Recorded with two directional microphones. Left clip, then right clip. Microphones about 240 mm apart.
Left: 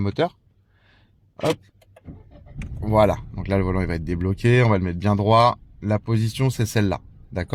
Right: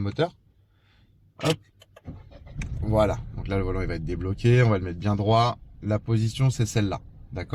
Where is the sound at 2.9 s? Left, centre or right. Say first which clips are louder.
Left 5 dB; left.